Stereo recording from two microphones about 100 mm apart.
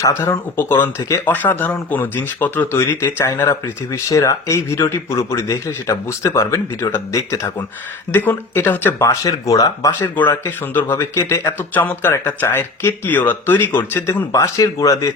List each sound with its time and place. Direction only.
0.0 s speech: 25° left (ahead or behind)
10.2 s speech: 20° left (ahead or behind)
14.3 s speech: 35° left (ahead or behind)